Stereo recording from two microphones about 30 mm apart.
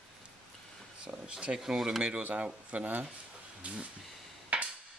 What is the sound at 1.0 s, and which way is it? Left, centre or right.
Speech, right.